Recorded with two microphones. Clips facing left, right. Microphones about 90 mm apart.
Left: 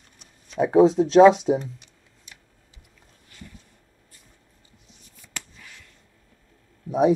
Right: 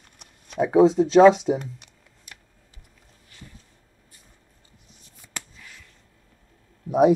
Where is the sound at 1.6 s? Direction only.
60° right (ahead or behind).